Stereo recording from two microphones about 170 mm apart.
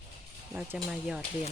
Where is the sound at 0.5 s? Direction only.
5° right (ahead or behind).